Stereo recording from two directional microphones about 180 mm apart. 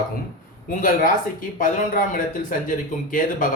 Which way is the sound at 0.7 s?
50° left (ahead or behind).